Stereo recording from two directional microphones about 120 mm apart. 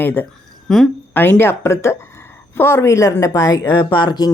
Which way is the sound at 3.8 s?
35° left (ahead or behind).